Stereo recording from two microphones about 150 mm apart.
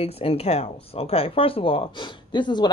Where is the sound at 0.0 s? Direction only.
40° left (ahead or behind).